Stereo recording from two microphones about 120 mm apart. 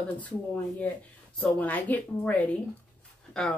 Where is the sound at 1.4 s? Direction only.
10° left (ahead or behind).